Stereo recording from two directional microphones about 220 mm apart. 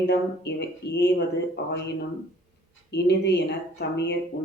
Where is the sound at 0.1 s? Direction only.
50° left (ahead or behind).